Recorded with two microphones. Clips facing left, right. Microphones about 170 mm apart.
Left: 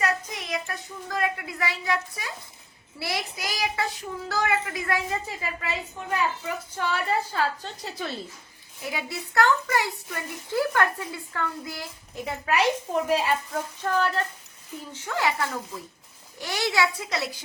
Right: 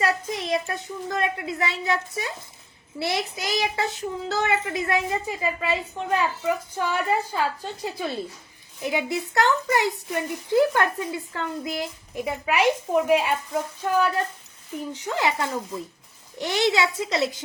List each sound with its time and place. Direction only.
0.0 s a woman's voice: 30° right (ahead or behind)